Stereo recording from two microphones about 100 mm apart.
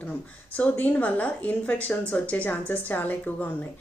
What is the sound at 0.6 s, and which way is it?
A woman's voice, 15° left (ahead or behind).